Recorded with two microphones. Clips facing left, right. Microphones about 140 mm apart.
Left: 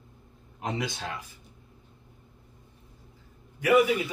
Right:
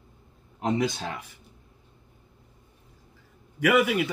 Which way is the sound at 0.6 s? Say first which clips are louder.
Right 6 dB; 25° right (ahead or behind).